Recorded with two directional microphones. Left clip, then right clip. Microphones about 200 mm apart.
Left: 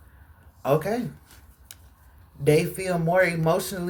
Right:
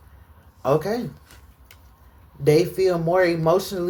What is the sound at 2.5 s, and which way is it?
Speech, 40° right (ahead or behind).